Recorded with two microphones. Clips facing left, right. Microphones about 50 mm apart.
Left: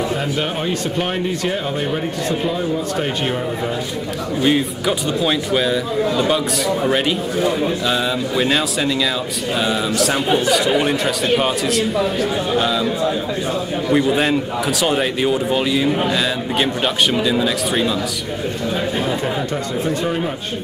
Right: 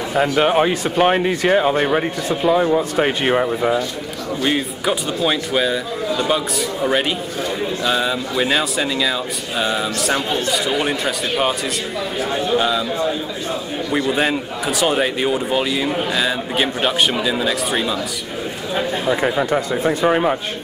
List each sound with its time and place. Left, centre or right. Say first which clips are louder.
0.1 s speech: right 6 dB; right
4.4 s a man's voice: left 3 dB; centre
19.8 s speech: right 1 dB; centre
20.1 s speech: right 5 dB; right